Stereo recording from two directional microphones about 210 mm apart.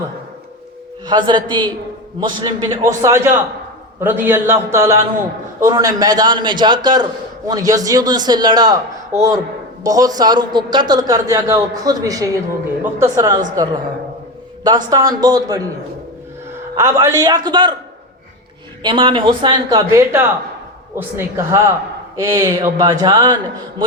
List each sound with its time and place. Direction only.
1.0 s a man's voice: 20° right (ahead or behind)
9.8 s a man's voice: 15° right (ahead or behind)
16.7 s a man's voice: 10° right (ahead or behind)
18.8 s a man's voice: 25° right (ahead or behind)